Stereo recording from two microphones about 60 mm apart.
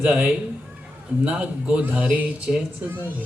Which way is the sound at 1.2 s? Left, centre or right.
Right.